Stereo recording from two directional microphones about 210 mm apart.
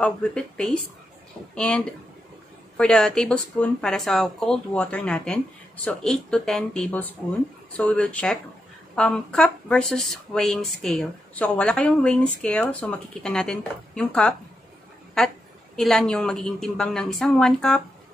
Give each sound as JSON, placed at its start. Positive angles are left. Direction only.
{"t": 0.0, "sound": "speech", "side_deg": 5}
{"t": 2.8, "sound": "speech", "side_deg": 5}